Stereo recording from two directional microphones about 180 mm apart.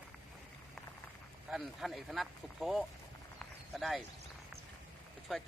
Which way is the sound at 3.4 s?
Centre (ahead or behind).